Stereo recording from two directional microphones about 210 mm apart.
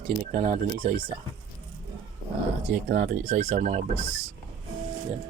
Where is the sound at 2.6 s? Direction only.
35° right (ahead or behind).